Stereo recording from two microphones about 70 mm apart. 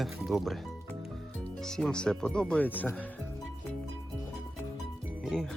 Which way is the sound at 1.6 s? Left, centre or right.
Centre.